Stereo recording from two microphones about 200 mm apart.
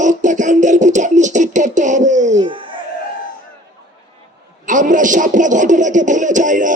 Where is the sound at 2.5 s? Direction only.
25° right (ahead or behind).